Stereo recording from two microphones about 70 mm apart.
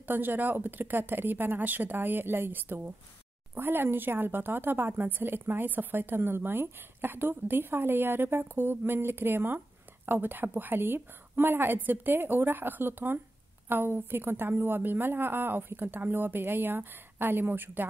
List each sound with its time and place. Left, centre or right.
0.0 s a woman's voice: right